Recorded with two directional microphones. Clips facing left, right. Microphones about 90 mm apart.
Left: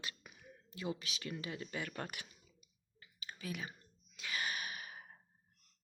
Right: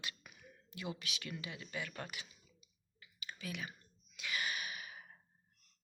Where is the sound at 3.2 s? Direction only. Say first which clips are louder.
Left 1 dB; 35° left (ahead or behind).